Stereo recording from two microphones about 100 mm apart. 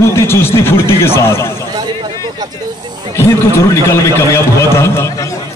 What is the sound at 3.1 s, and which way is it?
A man's voice, 30° left (ahead or behind).